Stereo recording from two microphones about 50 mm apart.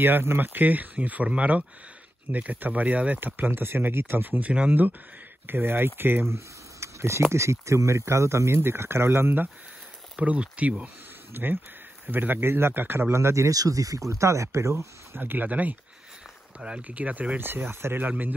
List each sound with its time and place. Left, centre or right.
0.0 s speech: right
4.5 s speech: right
5.5 s speech: right
6.2 s speech: right
10.2 s speech: right
11.3 s speech: right
13.9 s speech: right
15.1 s speech: right
16.5 s speech: centre
16.8 s speech: right
17.4 s speech: right
18.0 s speech: right